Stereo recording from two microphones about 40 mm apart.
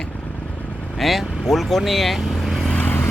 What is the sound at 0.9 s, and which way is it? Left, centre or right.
Speech, centre.